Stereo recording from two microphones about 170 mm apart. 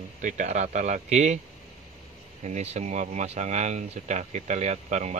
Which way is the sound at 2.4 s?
40° right (ahead or behind).